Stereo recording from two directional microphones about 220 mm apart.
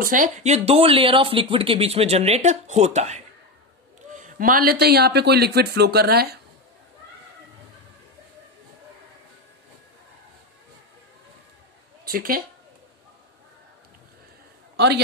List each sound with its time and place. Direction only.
0.0 s speech: 35° right (ahead or behind)
12.0 s speech: 40° right (ahead or behind)